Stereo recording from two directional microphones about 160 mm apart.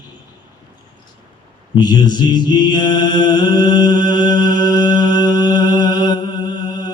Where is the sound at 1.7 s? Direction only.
25° left (ahead or behind).